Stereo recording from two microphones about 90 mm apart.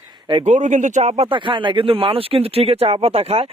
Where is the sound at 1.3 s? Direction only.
70° right (ahead or behind).